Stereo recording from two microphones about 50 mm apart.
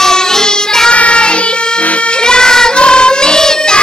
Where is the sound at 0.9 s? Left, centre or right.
Left.